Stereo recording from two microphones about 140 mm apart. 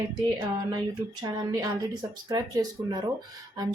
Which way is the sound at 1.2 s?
30° right (ahead or behind).